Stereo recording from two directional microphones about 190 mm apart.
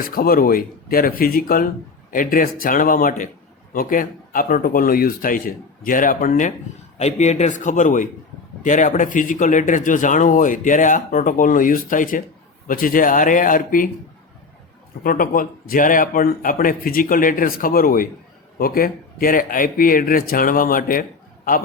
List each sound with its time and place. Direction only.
0.0 s a man's voice: 50° left (ahead or behind)
15.0 s speech: 45° left (ahead or behind)